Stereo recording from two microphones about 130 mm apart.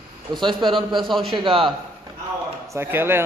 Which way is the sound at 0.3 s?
35° right (ahead or behind).